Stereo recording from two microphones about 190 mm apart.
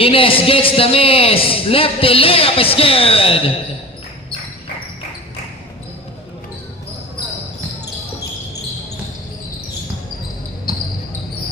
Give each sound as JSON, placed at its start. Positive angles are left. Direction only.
{"t": 0.0, "sound": "a man's voice", "side_deg": 30}